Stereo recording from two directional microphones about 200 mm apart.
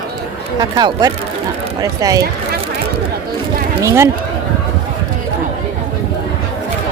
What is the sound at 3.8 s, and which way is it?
Speech, 15° right (ahead or behind).